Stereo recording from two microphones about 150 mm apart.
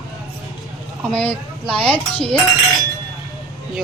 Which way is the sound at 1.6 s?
40° right (ahead or behind).